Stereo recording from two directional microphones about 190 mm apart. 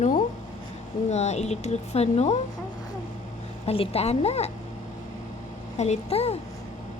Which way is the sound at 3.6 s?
30° left (ahead or behind).